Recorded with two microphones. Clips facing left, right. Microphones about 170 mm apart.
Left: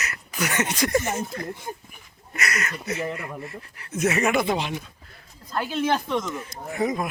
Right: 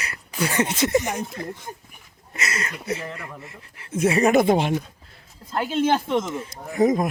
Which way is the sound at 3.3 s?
20° right (ahead or behind).